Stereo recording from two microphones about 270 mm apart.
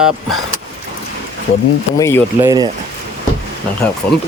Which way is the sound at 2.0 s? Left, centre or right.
Centre.